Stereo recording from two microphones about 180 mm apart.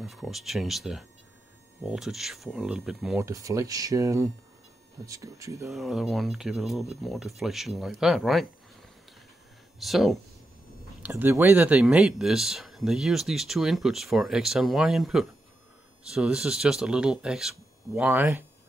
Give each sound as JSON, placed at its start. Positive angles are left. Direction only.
{"t": 0.0, "sound": "speech", "side_deg": 0}
{"t": 3.2, "sound": "speech", "side_deg": -20}
{"t": 5.7, "sound": "speech", "side_deg": 0}
{"t": 9.8, "sound": "speech", "side_deg": 0}